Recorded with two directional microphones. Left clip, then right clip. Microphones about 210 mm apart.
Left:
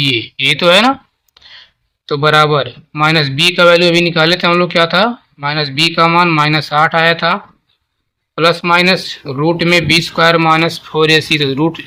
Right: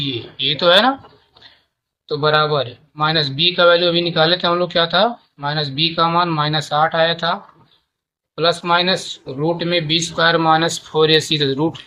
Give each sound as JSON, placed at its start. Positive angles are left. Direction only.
{"t": 0.0, "sound": "speech", "side_deg": 40}
{"t": 2.0, "sound": "speech", "side_deg": 40}
{"t": 8.4, "sound": "speech", "side_deg": 40}